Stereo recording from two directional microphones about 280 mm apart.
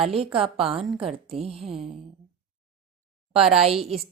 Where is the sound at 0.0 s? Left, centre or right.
Centre.